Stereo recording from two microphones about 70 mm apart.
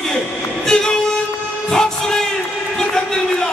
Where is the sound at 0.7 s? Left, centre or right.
Centre.